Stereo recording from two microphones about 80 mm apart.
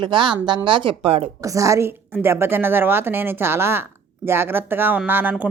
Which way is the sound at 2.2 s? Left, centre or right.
Right.